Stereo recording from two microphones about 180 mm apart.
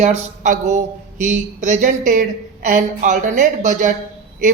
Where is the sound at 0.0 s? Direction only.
40° right (ahead or behind).